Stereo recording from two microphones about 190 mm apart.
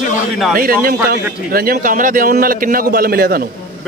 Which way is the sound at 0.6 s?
50° right (ahead or behind).